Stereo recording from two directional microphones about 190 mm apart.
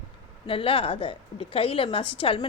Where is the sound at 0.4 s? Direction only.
30° left (ahead or behind).